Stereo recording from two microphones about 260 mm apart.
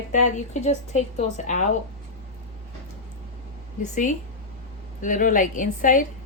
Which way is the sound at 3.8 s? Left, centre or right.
Left.